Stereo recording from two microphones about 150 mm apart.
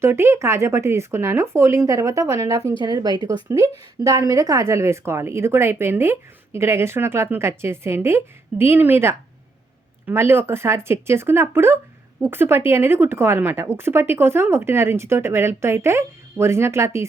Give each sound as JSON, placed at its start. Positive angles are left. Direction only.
{"t": 0.0, "sound": "speech", "side_deg": -15}